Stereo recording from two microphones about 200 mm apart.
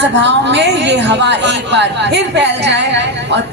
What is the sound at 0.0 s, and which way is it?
A woman's voice, 60° right (ahead or behind).